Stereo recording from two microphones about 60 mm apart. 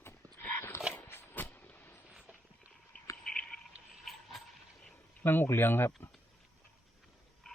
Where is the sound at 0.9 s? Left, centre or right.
Left.